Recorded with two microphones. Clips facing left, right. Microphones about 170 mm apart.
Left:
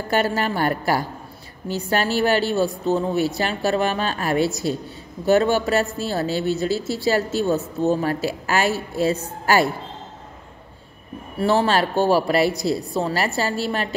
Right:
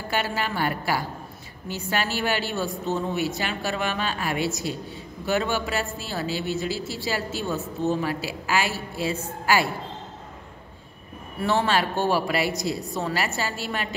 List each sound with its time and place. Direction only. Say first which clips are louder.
0.1 s a woman's voice: left 6 dB; 45° left (ahead or behind)
11.3 s speech: left 4 dB; 35° left (ahead or behind)